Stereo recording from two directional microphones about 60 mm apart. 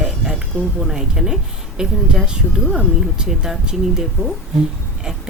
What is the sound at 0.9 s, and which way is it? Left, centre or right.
Speech, centre.